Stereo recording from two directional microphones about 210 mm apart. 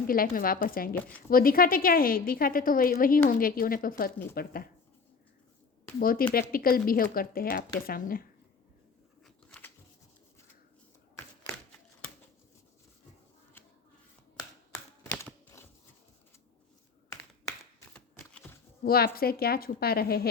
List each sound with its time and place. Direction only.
0.1 s a woman's voice: 45° left (ahead or behind)
6.0 s a woman's voice: 45° left (ahead or behind)
9.2 s a sound: 5° left (ahead or behind)
14.7 s typing: 15° left (ahead or behind)
17.7 s a sound: 5° left (ahead or behind)
18.9 s a woman's voice: 45° left (ahead or behind)